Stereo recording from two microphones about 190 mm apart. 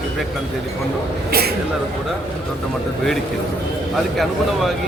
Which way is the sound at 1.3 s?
55° right (ahead or behind).